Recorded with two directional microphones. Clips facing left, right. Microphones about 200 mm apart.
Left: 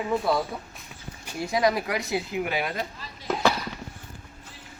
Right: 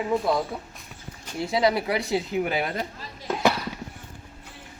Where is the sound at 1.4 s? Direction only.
25° right (ahead or behind).